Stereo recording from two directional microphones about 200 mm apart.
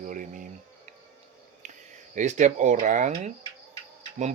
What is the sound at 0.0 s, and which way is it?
Insect, 40° right (ahead or behind).